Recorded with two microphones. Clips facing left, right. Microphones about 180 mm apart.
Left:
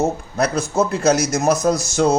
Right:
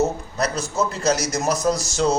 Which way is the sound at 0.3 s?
55° left (ahead or behind).